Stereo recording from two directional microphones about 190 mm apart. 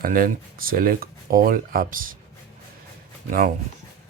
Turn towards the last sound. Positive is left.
turn(degrees=-45)  # may be behind; listen again after turning